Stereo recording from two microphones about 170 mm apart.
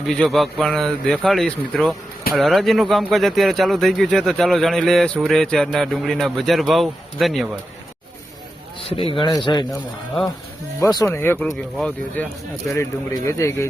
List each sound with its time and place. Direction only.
0.0 s speech: centre (ahead or behind)
8.8 s a sound: 35° left (ahead or behind)
9.1 s speech: 25° left (ahead or behind)
10.8 s speech: 20° left (ahead or behind)
13.2 s speech: 15° left (ahead or behind)